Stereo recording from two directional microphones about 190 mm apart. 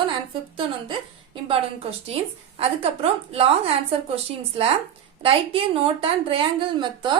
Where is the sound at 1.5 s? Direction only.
30° right (ahead or behind).